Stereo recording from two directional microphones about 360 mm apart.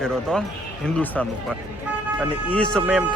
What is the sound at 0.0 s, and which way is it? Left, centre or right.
Speech, centre.